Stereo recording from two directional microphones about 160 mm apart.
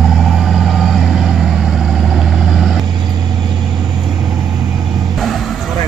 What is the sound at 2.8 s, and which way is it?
Vehicle, 25° right (ahead or behind).